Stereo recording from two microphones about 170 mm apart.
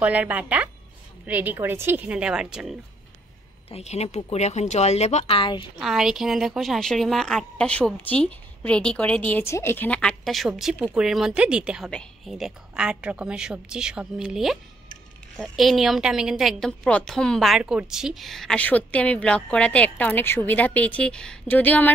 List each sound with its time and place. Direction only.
0.0 s speech: 10° right (ahead or behind)
3.7 s speech: 40° left (ahead or behind)
5.8 s speech: centre (ahead or behind)